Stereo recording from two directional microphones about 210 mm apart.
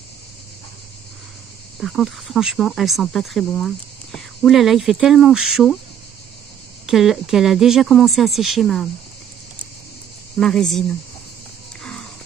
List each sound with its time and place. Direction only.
1.8 s speech: centre (ahead or behind)
6.9 s speech: centre (ahead or behind)
10.3 s speech: centre (ahead or behind)
11.8 s a sound: 5° left (ahead or behind)